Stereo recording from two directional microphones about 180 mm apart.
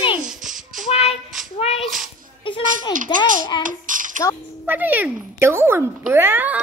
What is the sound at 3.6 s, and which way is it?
Child singing, 45° right (ahead or behind).